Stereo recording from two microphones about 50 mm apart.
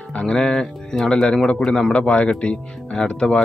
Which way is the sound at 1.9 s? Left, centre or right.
Left.